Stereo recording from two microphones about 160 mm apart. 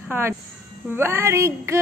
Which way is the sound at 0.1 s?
15° right (ahead or behind).